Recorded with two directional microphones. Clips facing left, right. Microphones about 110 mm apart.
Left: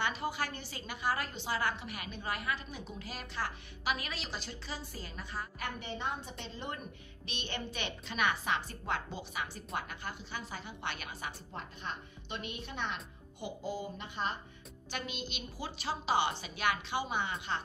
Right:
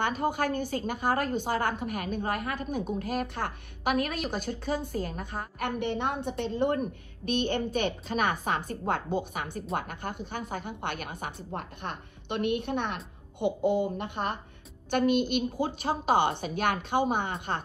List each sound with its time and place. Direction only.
0.0 s a woman's voice: 50° right (ahead or behind)